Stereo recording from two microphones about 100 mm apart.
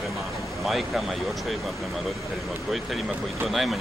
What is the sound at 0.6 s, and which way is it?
Speech, centre (ahead or behind).